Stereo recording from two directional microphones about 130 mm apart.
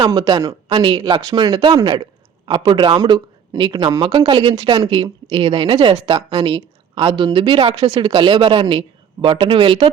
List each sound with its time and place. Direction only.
0.0 s speech: 30° right (ahead or behind); by 6.1 s 55° right (ahead or behind)
6.1 s speech: 40° right (ahead or behind)